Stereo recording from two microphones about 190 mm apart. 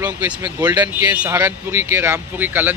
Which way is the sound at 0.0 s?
10° right (ahead or behind).